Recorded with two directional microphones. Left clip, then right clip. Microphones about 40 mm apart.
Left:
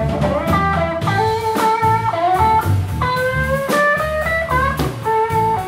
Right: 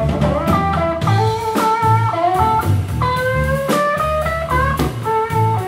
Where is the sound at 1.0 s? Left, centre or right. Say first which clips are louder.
Left 1 dB; centre.